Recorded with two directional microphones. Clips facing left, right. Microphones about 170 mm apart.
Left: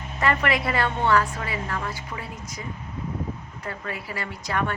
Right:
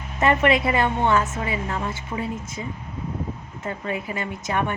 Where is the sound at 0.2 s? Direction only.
20° right (ahead or behind).